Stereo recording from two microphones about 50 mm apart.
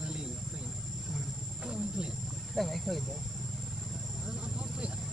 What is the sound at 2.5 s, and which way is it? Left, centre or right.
Vehicle, centre.